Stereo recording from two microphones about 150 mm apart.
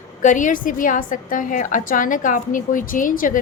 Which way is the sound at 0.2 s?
60° left (ahead or behind).